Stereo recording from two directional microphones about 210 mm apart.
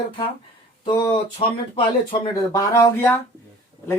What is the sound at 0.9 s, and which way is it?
Speech, 20° left (ahead or behind).